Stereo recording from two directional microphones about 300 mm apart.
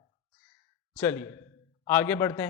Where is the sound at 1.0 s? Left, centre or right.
Centre.